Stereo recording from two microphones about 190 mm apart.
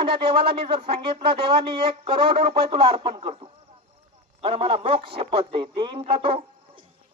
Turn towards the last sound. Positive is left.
turn(degrees=-30)  # may be behind; listen again after turning